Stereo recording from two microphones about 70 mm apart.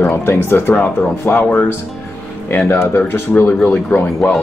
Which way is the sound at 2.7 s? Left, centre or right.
Left.